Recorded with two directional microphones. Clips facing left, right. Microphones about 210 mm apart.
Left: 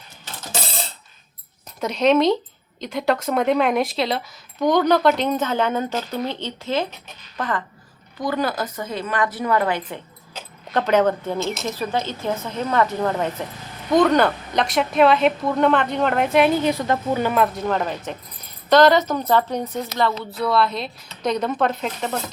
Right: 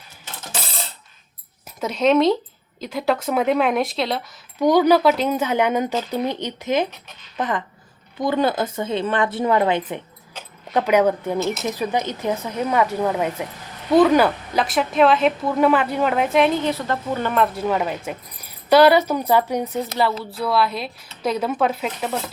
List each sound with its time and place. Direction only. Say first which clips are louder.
1.8 s a woman's voice: even; centre (ahead or behind); by 10.0 s 20° right (ahead or behind)
10.7 s speech: right 1 dB; 10° right (ahead or behind)
16.6 s speech: left 2 dB; 15° left (ahead or behind); by 22.2 s 5° right (ahead or behind)